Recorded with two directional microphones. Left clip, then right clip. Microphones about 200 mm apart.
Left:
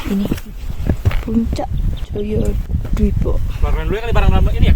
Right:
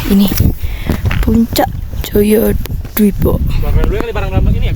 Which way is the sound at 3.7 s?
55° left (ahead or behind).